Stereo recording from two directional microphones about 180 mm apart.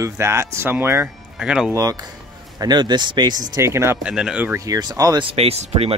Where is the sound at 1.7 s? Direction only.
20° right (ahead or behind).